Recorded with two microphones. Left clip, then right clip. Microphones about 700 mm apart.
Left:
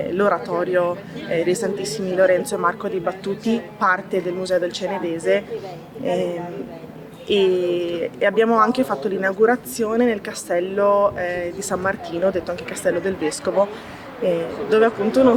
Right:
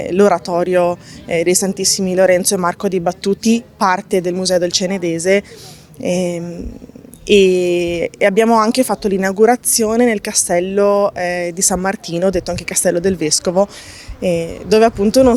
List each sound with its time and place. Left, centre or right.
0.1 s a woman's voice: right